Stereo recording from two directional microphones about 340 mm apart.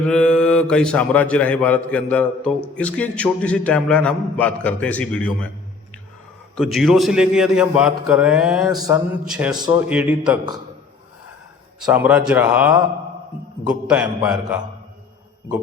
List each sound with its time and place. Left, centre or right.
0.1 s a man's voice: centre
6.6 s a man's voice: centre
11.8 s a man's voice: centre